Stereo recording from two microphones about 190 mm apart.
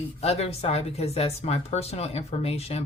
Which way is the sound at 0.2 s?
35° left (ahead or behind).